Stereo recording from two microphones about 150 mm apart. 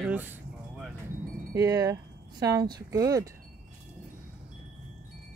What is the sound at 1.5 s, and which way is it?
Speech, 20° right (ahead or behind).